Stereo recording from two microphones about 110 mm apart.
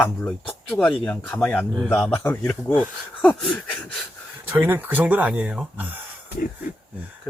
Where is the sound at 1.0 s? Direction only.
10° left (ahead or behind).